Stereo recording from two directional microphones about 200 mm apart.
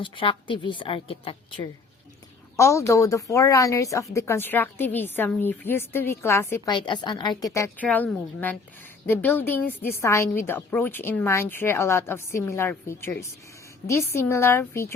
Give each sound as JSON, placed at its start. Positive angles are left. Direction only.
{"t": 0.0, "sound": "a woman's voice", "side_deg": 25}
{"t": 2.6, "sound": "a woman's voice", "side_deg": 15}